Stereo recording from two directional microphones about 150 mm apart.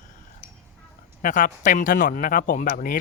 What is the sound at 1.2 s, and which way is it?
Speech, 60° left (ahead or behind).